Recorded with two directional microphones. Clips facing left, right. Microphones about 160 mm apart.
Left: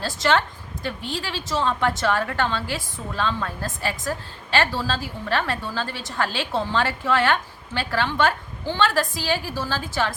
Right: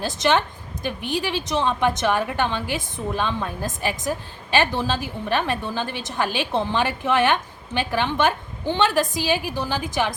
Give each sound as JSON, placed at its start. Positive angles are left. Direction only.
{"t": 0.0, "sound": "a woman's voice", "side_deg": -20}